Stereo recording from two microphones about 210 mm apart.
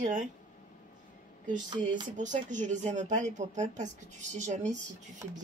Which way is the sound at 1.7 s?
20° right (ahead or behind).